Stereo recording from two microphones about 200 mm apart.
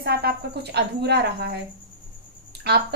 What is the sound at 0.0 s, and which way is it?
A woman's voice, 50° right (ahead or behind).